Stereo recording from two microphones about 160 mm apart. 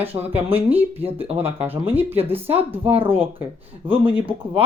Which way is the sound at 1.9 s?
15° right (ahead or behind).